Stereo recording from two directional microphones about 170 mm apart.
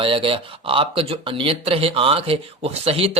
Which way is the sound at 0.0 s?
30° right (ahead or behind).